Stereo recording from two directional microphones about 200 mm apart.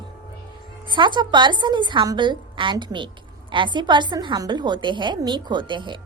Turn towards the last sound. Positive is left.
turn(degrees=-25)  # may be behind; listen again after turning